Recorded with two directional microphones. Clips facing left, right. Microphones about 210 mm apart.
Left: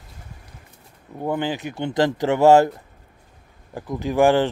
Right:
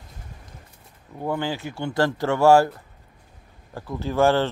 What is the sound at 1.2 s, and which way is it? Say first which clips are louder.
Speech: left 2 dB; 20° left (ahead or behind).